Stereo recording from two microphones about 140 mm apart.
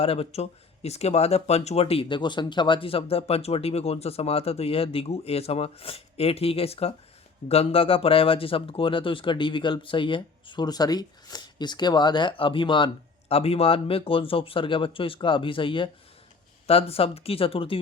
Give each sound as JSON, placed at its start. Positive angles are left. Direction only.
{"t": 0.0, "sound": "speech", "side_deg": 45}